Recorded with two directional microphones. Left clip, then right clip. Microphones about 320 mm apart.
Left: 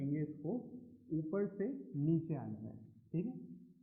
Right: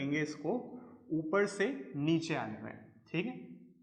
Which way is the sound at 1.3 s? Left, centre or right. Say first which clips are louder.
Right 9 dB; centre.